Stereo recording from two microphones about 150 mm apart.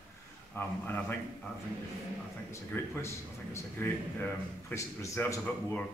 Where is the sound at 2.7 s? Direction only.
15° left (ahead or behind).